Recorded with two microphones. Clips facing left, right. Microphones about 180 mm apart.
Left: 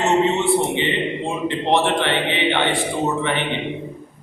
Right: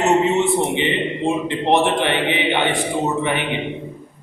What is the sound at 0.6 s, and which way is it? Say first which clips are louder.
A man's voice: right 1 dB; 15° right (ahead or behind).